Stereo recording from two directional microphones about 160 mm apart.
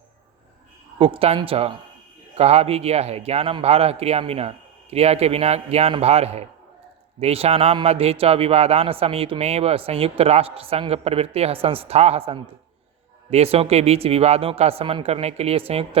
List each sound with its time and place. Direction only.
0.9 s a man's voice: 35° right (ahead or behind)